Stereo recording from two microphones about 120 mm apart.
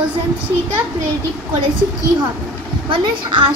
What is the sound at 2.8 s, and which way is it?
Speech, 45° right (ahead or behind).